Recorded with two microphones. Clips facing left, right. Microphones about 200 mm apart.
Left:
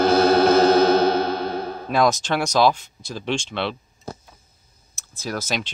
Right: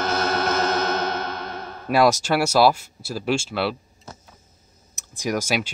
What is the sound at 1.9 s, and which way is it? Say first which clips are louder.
Speech: right 2 dB; 10° right (ahead or behind).